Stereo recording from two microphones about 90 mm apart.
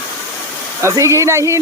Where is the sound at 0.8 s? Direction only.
35° right (ahead or behind).